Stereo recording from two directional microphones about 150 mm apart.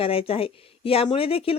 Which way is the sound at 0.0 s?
40° left (ahead or behind).